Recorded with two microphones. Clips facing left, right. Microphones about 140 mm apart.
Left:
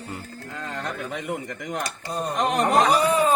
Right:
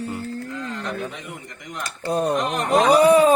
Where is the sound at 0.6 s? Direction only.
55° left (ahead or behind).